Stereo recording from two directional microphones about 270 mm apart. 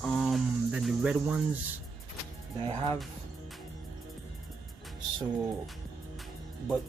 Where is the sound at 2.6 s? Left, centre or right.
Centre.